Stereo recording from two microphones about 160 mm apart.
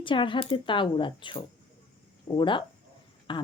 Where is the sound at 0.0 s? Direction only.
30° left (ahead or behind).